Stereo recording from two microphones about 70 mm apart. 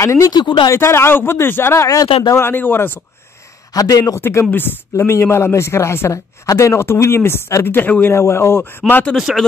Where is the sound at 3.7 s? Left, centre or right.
Left.